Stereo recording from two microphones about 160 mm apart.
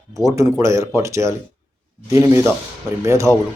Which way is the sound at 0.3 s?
20° right (ahead or behind).